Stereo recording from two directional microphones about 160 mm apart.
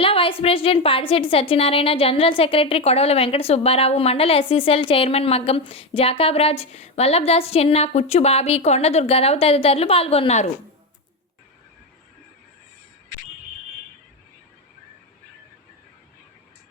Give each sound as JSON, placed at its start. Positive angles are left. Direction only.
{"t": 0.0, "sound": "a woman's voice", "side_deg": 35}